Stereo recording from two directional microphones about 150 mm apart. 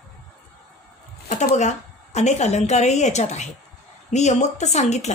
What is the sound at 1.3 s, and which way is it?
Speech, 50° left (ahead or behind).